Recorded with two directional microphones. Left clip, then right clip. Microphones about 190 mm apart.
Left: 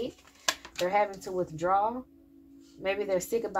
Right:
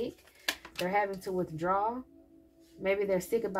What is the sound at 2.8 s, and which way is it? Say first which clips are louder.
Speech: even; 35° left (ahead or behind).